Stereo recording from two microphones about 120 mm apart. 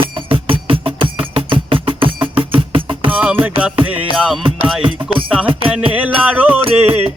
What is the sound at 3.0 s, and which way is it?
Music, 15° right (ahead or behind).